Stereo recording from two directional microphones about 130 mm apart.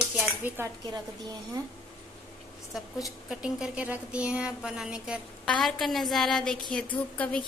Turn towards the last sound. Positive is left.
turn(degrees=10)  # may be behind; listen again after turning